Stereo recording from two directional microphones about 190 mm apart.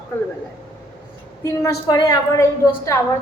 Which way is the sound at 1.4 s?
20° left (ahead or behind).